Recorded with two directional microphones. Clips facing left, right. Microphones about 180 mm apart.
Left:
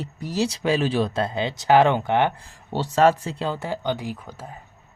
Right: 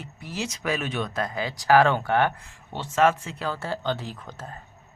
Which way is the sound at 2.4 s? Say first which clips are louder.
Left 8 dB; 35° left (ahead or behind).